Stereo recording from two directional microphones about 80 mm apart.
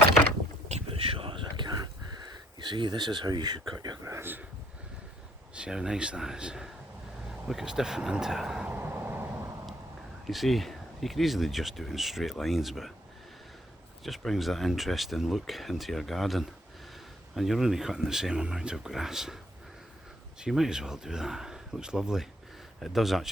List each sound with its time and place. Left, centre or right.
1.3 s a sound: right
2.6 s speech: right
4.0 s a sound: right
5.5 s speech: centre
8.6 s vehicle: right
10.2 s speech: centre
14.2 s speech: centre
20.4 s speech: centre